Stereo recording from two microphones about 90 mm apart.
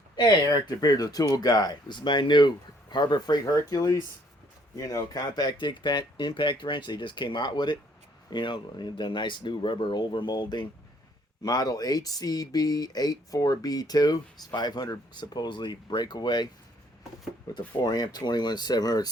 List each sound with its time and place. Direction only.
0.2 s speech: 50° left (ahead or behind)
3.4 s speech: 40° left (ahead or behind)
17.7 s speech: 50° left (ahead or behind)